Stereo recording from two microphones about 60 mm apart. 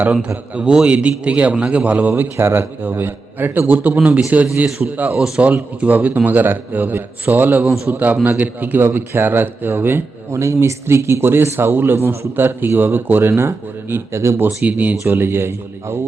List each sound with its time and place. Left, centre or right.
0.0 s a man's voice: right
10.3 s a man's voice: right
13.9 s speech: right
14.4 s a man's voice: right
15.0 s speech: right